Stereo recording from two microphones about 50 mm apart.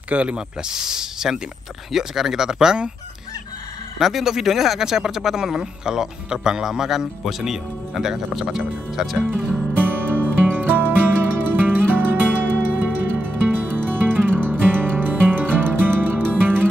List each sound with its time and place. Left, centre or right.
0.1 s speech: right
0.6 s speech: centre
4.0 s speech: centre
9.8 s music: right